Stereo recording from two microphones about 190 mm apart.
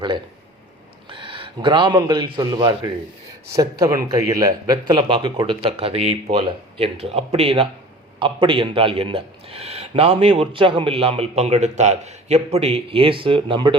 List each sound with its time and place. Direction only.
1.1 s a man's voice: 25° right (ahead or behind)